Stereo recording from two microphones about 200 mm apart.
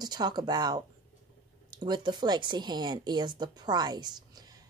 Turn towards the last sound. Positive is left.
turn(degrees=-20)  # may be behind; listen again after turning